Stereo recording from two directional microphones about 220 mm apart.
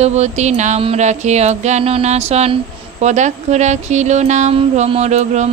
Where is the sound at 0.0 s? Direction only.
30° right (ahead or behind).